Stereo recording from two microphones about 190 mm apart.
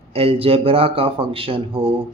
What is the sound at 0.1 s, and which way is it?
A man's voice, 30° right (ahead or behind).